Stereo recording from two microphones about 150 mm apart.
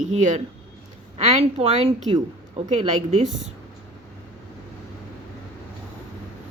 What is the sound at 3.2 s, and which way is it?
Speech, 5° right (ahead or behind).